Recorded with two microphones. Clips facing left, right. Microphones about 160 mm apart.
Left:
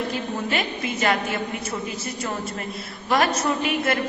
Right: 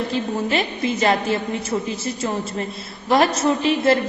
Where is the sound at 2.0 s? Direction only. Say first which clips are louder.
Right 4 dB; 30° right (ahead or behind).